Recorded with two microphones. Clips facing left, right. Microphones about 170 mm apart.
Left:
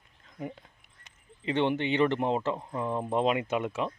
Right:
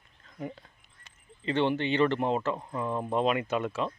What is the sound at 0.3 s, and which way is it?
Speech, 15° left (ahead or behind).